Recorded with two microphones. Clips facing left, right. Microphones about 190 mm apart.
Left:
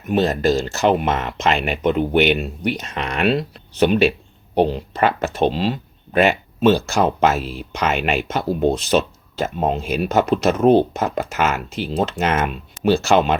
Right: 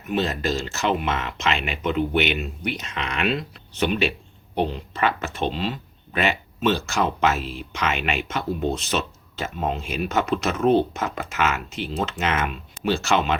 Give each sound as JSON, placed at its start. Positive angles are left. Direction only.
{"t": 0.1, "sound": "speech", "side_deg": 45}